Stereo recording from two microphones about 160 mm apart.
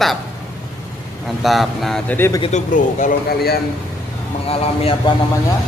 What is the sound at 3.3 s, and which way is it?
Speech, 75° left (ahead or behind).